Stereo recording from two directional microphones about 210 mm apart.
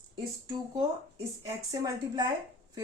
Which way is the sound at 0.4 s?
20° right (ahead or behind).